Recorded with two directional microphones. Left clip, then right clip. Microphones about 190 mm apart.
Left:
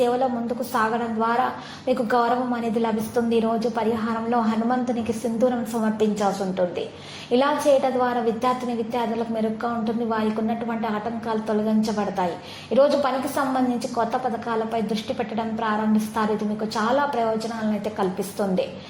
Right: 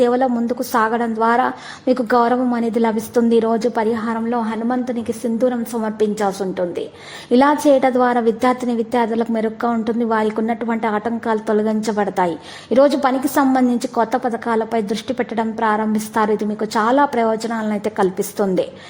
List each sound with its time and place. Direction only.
0.0 s a woman's voice: 40° right (ahead or behind)
16.7 s a woman's voice: 45° right (ahead or behind)